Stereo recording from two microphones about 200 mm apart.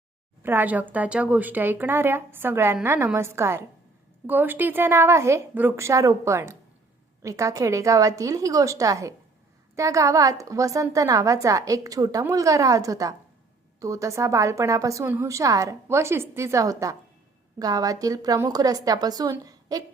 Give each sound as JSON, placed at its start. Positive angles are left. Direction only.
{"t": 0.4, "sound": "a woman's voice", "side_deg": -10}